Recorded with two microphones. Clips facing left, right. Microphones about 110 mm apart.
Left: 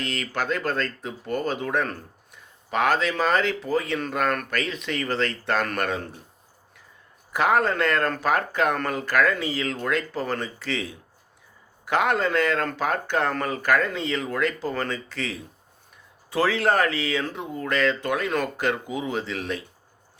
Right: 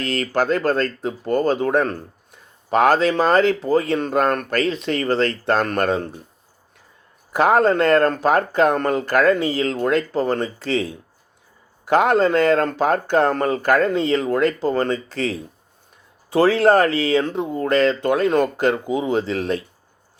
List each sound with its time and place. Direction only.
0.0 s speech: 35° right (ahead or behind)
7.3 s speech: 35° right (ahead or behind)